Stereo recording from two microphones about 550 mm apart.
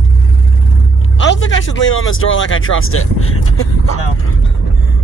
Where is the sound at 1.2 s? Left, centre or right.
Centre.